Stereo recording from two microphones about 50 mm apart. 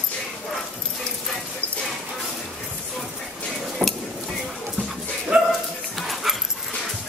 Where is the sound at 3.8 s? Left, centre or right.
Centre.